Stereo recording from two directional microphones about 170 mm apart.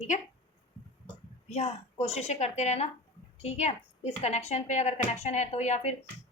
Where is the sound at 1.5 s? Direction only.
40° left (ahead or behind).